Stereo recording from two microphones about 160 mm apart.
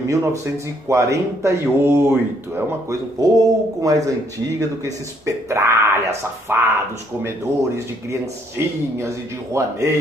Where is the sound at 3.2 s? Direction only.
20° right (ahead or behind).